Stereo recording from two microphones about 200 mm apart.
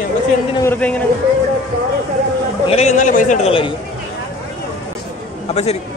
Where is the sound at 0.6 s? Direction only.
10° left (ahead or behind).